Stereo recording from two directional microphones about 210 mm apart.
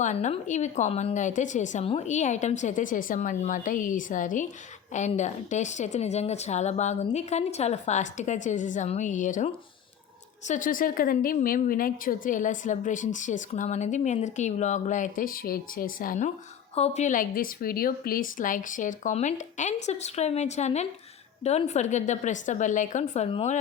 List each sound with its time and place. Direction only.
0.0 s a woman's voice: 35° left (ahead or behind)